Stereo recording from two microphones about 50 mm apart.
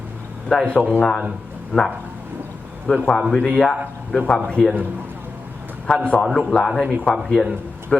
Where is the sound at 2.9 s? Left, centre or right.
Left.